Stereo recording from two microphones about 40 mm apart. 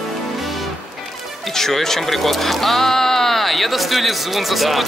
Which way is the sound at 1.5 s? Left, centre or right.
Centre.